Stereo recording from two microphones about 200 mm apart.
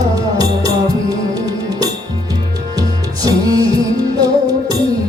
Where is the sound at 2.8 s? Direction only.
20° right (ahead or behind).